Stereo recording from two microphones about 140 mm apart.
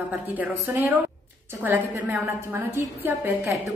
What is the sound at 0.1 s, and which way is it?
A woman's voice, 10° right (ahead or behind).